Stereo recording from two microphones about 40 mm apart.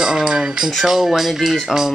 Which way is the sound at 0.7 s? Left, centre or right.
Centre.